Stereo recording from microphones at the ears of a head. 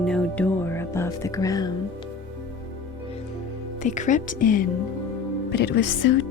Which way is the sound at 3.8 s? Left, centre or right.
Left.